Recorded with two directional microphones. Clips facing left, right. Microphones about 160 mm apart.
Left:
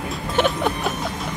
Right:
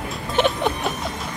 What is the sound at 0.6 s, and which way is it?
Music, centre (ahead or behind).